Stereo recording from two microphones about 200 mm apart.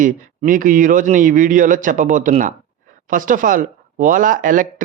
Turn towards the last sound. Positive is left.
turn(degrees=-40)  # may be behind; listen again after turning